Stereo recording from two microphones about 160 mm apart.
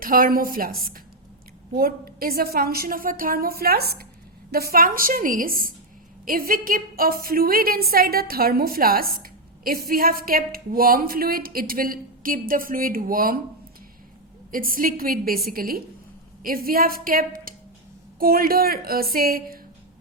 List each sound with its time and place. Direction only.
0.0 s a woman's voice: 60° right (ahead or behind); by 4.0 s 75° right (ahead or behind)
4.5 s a woman's voice: 65° right (ahead or behind)
14.5 s a woman's voice: 60° right (ahead or behind)